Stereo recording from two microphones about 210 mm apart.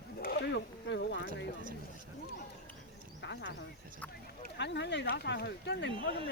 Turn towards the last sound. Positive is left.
turn(degrees=55)  # may be behind; listen again after turning